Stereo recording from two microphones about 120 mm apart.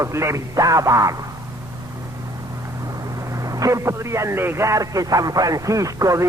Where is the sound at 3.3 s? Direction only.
30° right (ahead or behind).